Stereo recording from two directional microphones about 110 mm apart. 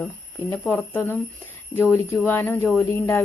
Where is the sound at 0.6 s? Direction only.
15° left (ahead or behind).